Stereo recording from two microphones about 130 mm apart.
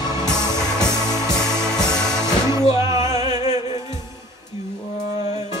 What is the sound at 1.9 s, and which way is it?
Music, 5° left (ahead or behind).